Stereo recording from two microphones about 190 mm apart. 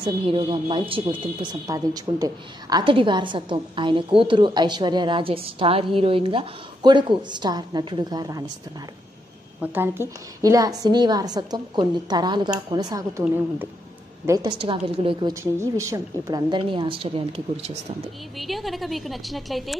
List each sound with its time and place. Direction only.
0.0 s a woman's voice: 25° right (ahead or behind)
9.6 s a woman's voice: 10° right (ahead or behind)
14.2 s a woman's voice: 20° right (ahead or behind)
15.6 s a woman's voice: 15° right (ahead or behind)
18.4 s a woman's voice: centre (ahead or behind)